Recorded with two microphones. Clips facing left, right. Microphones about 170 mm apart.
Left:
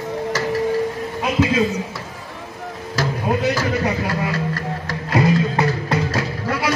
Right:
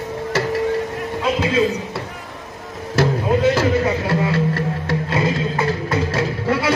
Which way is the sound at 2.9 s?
25° right (ahead or behind).